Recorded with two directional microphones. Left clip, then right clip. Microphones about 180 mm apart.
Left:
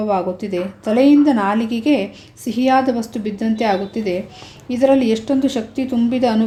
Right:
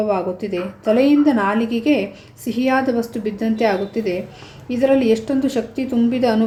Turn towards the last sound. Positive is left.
turn(degrees=20)  # may be behind; listen again after turning